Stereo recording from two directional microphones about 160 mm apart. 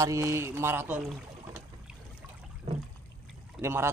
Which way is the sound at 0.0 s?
15° right (ahead or behind).